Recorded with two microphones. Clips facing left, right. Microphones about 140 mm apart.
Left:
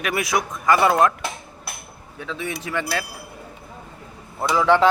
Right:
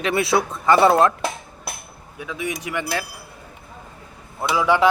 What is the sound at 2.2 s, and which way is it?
Speech, 15° right (ahead or behind).